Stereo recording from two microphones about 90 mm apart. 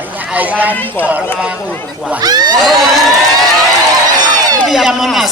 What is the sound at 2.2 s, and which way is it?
Speech, 50° right (ahead or behind).